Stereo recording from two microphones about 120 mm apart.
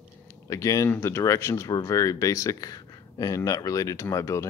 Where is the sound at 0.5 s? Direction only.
25° left (ahead or behind).